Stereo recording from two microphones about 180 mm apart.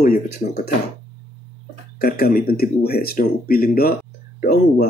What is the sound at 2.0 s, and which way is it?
Speech, 55° left (ahead or behind).